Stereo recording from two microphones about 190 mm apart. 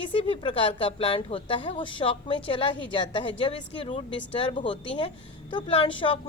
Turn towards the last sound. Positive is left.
turn(degrees=30)  # may be behind; listen again after turning